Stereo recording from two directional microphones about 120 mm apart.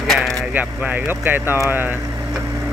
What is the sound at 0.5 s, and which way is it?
Speech, 15° right (ahead or behind).